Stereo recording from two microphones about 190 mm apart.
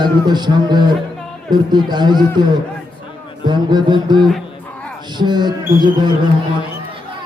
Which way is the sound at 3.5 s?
25° right (ahead or behind).